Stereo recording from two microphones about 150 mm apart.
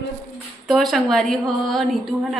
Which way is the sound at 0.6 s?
Centre (ahead or behind).